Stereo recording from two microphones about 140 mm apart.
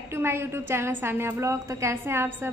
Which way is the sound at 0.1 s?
20° right (ahead or behind).